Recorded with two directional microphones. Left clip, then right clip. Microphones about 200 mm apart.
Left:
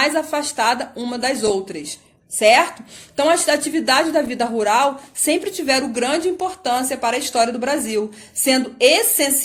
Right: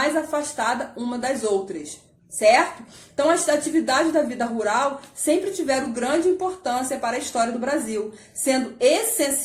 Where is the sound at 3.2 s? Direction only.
40° left (ahead or behind).